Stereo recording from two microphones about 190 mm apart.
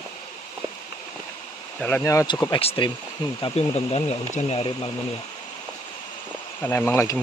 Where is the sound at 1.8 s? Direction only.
5° left (ahead or behind).